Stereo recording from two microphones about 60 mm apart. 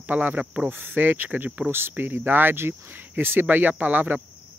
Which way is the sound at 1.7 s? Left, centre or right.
Right.